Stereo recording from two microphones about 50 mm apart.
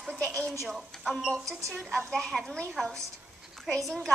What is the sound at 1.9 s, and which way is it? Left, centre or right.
Speech, centre.